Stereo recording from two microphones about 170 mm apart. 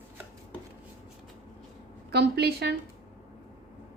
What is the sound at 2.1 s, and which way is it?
Speech, 75° right (ahead or behind).